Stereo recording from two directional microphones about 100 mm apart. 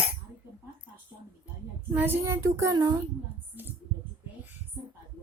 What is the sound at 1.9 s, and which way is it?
Speech, 20° right (ahead or behind).